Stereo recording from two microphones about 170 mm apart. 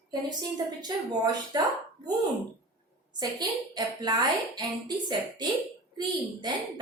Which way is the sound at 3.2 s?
25° right (ahead or behind).